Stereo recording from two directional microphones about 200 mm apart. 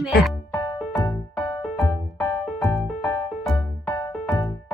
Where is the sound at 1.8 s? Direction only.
Centre (ahead or behind).